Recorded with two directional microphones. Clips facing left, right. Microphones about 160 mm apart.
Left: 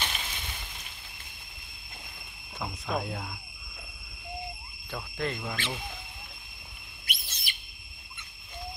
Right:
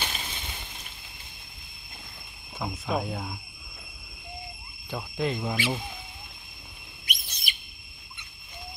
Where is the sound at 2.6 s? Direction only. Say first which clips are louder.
Right 3 dB; 5° right (ahead or behind).